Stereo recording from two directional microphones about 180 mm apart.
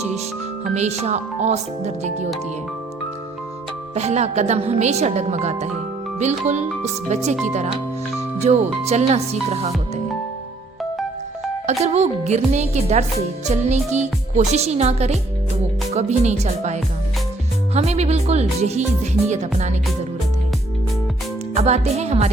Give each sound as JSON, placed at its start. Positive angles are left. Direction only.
{"t": 0.6, "sound": "speech", "side_deg": -40}
{"t": 3.9, "sound": "speech", "side_deg": -35}
{"t": 11.6, "sound": "speech", "side_deg": -40}
{"t": 21.5, "sound": "speech", "side_deg": -35}